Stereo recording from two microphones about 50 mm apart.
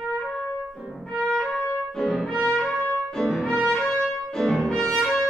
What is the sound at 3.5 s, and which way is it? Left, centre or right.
Music, left.